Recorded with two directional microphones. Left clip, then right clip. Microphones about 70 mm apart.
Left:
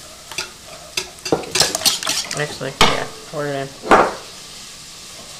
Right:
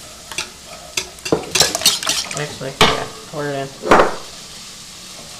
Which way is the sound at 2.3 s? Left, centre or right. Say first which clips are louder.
Left 2 dB; left.